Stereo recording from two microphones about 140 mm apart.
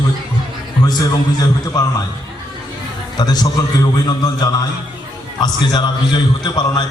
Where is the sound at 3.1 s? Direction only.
30° left (ahead or behind).